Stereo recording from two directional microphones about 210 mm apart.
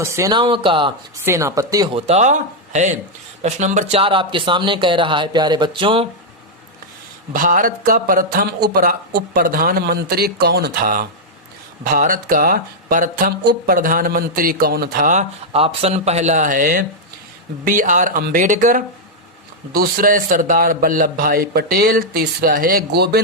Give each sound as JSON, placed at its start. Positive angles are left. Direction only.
{"t": 0.0, "sound": "speech", "side_deg": -15}
{"t": 7.3, "sound": "speech", "side_deg": -40}